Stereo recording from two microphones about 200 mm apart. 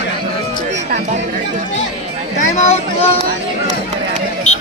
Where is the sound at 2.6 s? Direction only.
35° left (ahead or behind).